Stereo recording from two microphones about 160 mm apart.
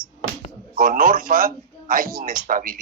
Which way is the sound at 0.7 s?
60° right (ahead or behind).